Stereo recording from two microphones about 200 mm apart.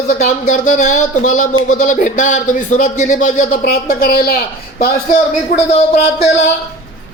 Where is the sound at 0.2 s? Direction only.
40° left (ahead or behind).